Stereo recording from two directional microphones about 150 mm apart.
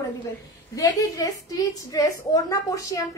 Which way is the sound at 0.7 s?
20° left (ahead or behind).